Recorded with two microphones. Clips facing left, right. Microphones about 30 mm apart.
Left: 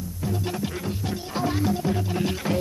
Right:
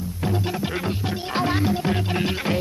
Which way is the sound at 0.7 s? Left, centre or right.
Right.